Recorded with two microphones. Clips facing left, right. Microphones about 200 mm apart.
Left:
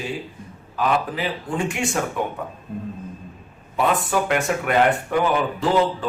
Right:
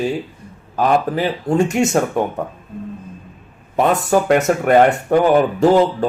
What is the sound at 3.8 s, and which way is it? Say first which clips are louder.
A man's voice: right 6 dB; 40° right (ahead or behind).